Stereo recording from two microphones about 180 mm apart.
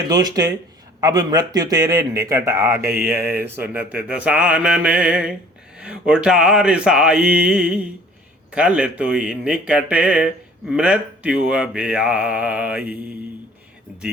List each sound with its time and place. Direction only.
0.1 s speech: 20° right (ahead or behind)
3.4 s mantra: 10° right (ahead or behind)
8.5 s speech: 5° right (ahead or behind)